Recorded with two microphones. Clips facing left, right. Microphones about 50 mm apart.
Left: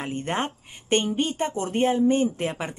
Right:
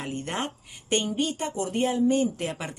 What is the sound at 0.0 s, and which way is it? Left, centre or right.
A woman's voice, left.